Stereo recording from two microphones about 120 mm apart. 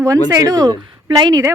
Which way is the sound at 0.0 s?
25° right (ahead or behind).